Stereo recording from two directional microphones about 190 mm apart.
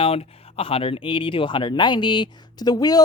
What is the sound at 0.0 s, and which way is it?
A woman's voice, 30° left (ahead or behind).